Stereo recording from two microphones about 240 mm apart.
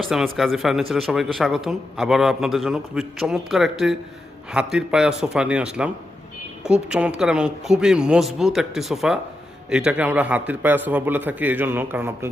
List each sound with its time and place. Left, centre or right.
0.3 s a man's voice: centre